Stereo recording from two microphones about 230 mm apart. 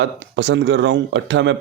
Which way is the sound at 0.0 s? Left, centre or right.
Right.